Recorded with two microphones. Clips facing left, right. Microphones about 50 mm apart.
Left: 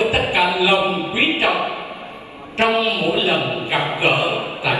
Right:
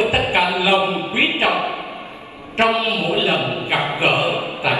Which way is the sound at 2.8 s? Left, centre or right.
Right.